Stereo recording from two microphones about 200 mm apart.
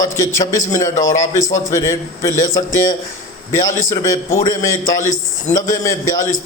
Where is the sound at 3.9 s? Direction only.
15° left (ahead or behind).